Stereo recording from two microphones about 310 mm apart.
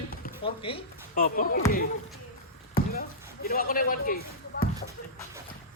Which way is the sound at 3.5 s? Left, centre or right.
Left.